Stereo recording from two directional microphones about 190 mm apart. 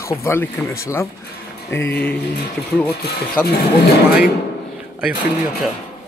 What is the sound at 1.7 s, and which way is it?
Speech, 10° left (ahead or behind).